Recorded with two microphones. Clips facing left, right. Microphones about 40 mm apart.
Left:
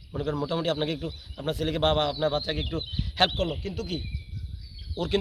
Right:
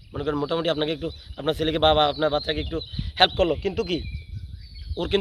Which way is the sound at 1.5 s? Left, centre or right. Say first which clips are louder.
Right 5 dB; right.